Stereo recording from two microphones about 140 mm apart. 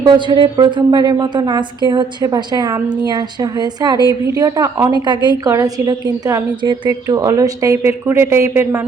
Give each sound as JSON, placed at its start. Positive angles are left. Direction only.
{"t": 0.0, "sound": "a woman's voice", "side_deg": -35}